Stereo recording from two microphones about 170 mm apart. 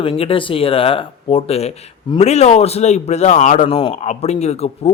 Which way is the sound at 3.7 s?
30° left (ahead or behind).